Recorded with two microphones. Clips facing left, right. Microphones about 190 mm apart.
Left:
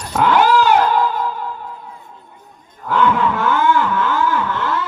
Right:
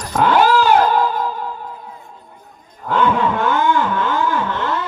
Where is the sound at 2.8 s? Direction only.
15° right (ahead or behind).